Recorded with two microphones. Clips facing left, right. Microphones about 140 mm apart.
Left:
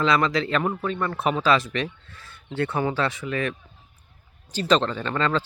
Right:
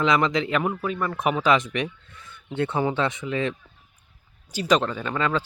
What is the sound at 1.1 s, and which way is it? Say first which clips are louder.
Speech: right 1 dB; 15° right (ahead or behind).